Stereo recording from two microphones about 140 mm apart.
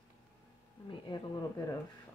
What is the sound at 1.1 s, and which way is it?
Speech, 30° left (ahead or behind).